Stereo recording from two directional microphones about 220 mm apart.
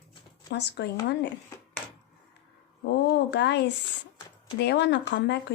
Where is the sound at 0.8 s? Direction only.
50° left (ahead or behind).